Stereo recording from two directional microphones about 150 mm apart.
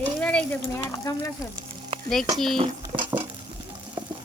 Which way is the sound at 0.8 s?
25° left (ahead or behind).